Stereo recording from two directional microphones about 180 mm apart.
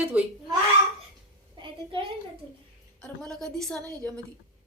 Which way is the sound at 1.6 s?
30° right (ahead or behind).